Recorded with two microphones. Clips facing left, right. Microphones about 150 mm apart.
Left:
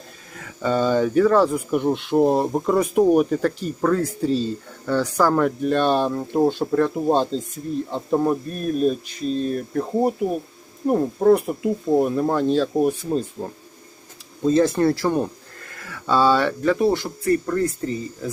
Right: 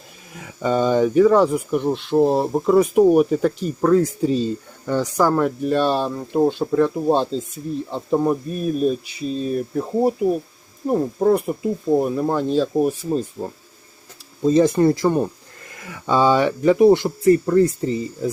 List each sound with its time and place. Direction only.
0.3 s speech: 10° right (ahead or behind)
1.7 s speech: 5° left (ahead or behind); by 5.3 s 15° right (ahead or behind)
5.3 s speech: centre (ahead or behind); by 17.7 s 25° right (ahead or behind)